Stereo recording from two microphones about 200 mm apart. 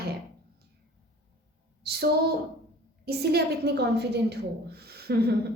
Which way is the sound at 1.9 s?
55° right (ahead or behind).